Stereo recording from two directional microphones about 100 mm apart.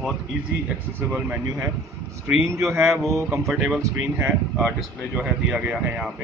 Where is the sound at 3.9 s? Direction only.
20° right (ahead or behind).